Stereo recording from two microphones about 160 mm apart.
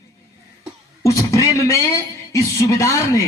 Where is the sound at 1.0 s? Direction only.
20° left (ahead or behind).